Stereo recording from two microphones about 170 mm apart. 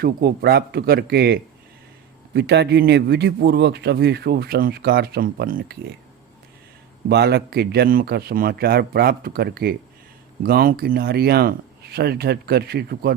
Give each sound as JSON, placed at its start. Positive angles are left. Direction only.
{"t": 0.0, "sound": "speech", "side_deg": -65}
{"t": 2.3, "sound": "speech", "side_deg": -85}
{"t": 7.1, "sound": "a man's voice", "side_deg": -75}